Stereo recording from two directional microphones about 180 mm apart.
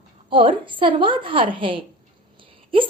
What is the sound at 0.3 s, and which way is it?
Speech, 30° right (ahead or behind).